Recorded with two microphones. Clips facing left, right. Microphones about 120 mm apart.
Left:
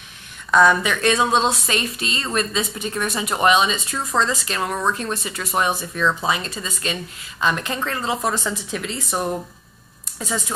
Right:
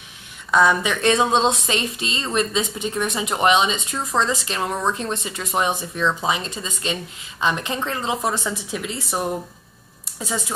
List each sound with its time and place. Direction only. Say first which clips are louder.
0.5 s a woman's voice: left 2 dB; 15° right (ahead or behind)
1.0 s a woman's voice: right 1 dB; 25° right (ahead or behind)
10.1 s speech: left 1 dB; 15° right (ahead or behind)